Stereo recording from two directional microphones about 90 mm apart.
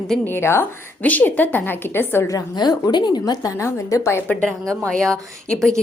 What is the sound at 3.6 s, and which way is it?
Speech, 30° left (ahead or behind).